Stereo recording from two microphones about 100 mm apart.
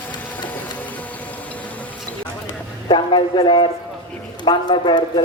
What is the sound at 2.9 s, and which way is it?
Speech, 55° left (ahead or behind).